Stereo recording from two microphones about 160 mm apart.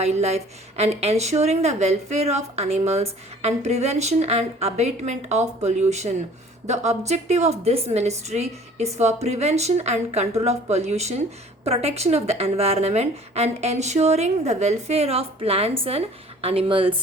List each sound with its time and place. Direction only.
0.0 s a woman's voice: 45° right (ahead or behind)